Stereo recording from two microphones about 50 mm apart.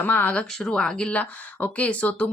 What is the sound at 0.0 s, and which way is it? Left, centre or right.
Speech, left.